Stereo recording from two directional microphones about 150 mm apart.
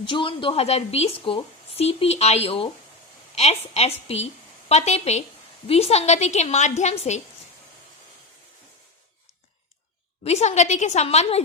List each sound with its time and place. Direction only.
0.0 s a woman's voice: 35° left (ahead or behind)
10.2 s a woman's voice: 50° left (ahead or behind)